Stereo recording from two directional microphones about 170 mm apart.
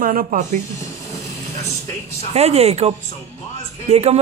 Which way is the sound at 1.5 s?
20° left (ahead or behind).